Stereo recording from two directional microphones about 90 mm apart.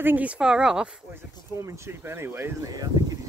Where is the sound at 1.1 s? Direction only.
25° right (ahead or behind).